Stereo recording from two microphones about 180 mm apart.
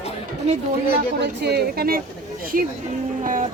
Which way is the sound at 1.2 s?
70° right (ahead or behind).